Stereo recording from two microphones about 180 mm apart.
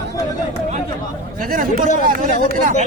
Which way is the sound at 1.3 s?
50° right (ahead or behind).